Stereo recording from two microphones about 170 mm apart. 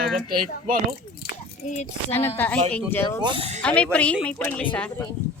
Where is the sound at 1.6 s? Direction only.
45° left (ahead or behind).